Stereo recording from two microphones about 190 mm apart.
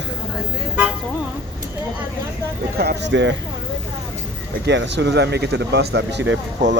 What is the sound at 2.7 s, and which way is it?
Speech, 60° right (ahead or behind).